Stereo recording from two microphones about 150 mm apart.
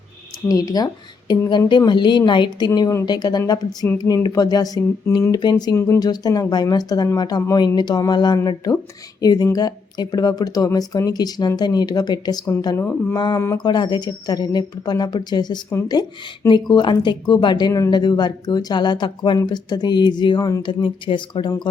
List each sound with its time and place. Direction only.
0.4 s speech: 25° left (ahead or behind)
5.7 s speech: 15° left (ahead or behind)
12.6 s speech: 15° left (ahead or behind)
13.6 s speech: 30° left (ahead or behind)